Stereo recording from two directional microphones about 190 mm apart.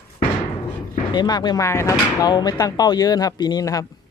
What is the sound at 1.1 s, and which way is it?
Speech, 20° left (ahead or behind).